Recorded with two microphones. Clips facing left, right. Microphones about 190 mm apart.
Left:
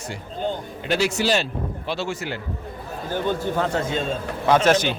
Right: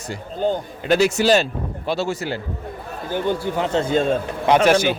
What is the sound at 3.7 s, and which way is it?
Speech, 30° right (ahead or behind).